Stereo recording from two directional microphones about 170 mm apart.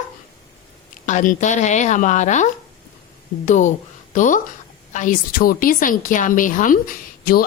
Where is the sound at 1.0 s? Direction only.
50° left (ahead or behind).